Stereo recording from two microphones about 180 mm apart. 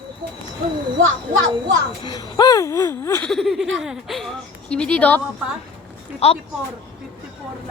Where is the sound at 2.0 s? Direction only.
20° left (ahead or behind).